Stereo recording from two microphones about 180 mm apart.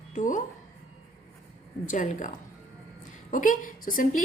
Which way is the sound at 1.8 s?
45° left (ahead or behind).